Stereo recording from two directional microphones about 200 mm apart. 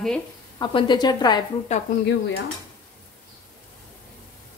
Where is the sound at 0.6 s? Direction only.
25° left (ahead or behind).